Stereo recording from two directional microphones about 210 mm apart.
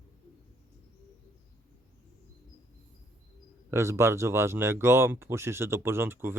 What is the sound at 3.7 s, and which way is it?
Speech, 15° right (ahead or behind).